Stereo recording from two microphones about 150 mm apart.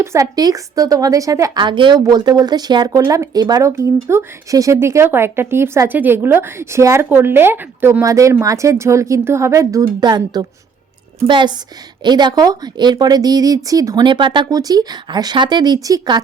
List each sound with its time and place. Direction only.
0.0 s a woman's voice: 20° right (ahead or behind)